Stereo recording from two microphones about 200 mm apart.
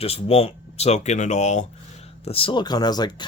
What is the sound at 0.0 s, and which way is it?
Speech, 30° left (ahead or behind).